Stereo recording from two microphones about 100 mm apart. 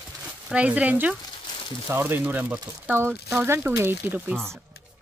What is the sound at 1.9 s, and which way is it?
Speech, 20° right (ahead or behind).